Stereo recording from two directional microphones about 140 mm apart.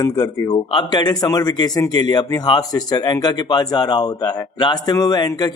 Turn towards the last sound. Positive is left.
turn(degrees=30)  # may be behind; listen again after turning